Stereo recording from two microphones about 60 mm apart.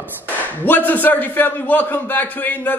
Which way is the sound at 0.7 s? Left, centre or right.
Left.